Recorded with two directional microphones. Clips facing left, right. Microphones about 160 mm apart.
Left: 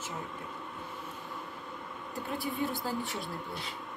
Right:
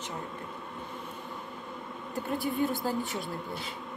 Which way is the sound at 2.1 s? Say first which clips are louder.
Right 5 dB; centre (ahead or behind).